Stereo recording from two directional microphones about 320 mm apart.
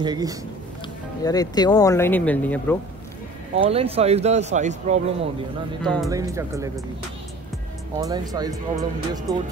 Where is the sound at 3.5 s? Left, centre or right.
Centre.